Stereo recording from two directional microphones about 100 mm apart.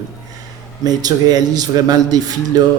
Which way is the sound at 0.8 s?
40° right (ahead or behind).